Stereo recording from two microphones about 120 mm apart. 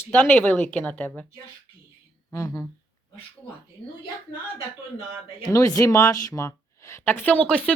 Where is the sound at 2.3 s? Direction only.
25° left (ahead or behind).